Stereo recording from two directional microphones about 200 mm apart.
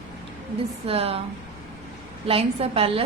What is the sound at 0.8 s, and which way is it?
Speech, 30° right (ahead or behind).